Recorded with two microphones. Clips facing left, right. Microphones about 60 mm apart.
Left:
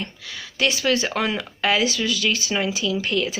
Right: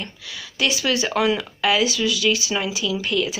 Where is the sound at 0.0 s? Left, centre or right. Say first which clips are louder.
Left 1 dB; left.